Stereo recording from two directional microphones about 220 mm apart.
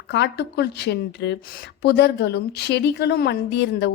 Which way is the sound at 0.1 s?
50° left (ahead or behind).